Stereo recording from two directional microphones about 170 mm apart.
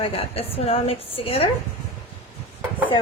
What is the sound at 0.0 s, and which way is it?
A woman's voice, 35° left (ahead or behind).